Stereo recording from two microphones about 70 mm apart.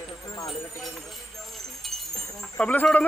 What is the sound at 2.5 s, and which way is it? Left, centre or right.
Speech, left.